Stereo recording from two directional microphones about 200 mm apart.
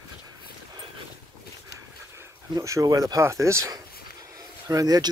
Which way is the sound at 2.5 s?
15° right (ahead or behind).